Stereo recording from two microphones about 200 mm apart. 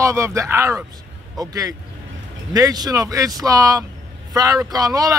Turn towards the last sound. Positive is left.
turn(degrees=-15)  # may be behind; listen again after turning